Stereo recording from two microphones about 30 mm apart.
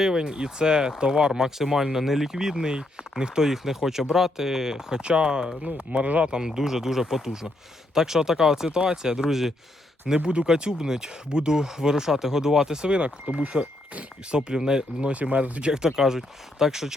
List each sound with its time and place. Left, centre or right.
0.0 s speech: right
3.5 s speech: centre; by 5.5 s right
6.0 s speech: right
6.3 s speech: right
6.6 s speech: centre
9.3 s speech: centre
10.2 s speech: right
12.8 s speech: right
13.3 s speech: right
14.3 s speech: right
15.1 s speech: right
15.6 s speech: right